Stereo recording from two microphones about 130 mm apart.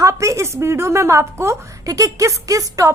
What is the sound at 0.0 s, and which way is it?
A woman's voice, 25° right (ahead or behind).